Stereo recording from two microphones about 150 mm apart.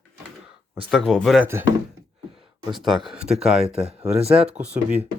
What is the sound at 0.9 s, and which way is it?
Speech, centre (ahead or behind).